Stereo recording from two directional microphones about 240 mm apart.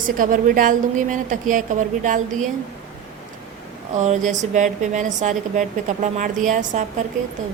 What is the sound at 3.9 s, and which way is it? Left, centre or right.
A woman's voice, right.